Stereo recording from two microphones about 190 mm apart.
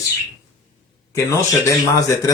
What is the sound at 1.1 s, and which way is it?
Speech, 15° left (ahead or behind).